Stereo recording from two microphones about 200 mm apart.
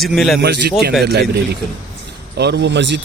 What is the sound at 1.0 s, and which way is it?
Speech, 55° right (ahead or behind).